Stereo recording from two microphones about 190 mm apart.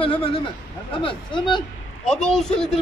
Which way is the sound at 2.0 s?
5° left (ahead or behind).